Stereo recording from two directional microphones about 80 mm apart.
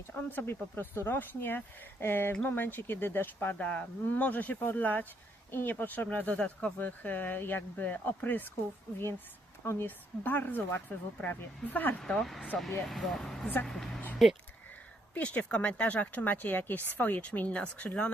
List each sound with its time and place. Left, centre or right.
0.1 s speech: left
3.6 s speech: centre
9.6 s speech: left
11.9 s speech: centre
15.1 s speech: centre